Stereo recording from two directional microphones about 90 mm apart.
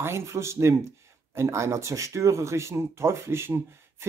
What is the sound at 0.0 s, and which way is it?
Speech, 30° right (ahead or behind).